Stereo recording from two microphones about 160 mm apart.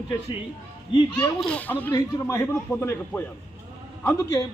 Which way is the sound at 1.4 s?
10° left (ahead or behind).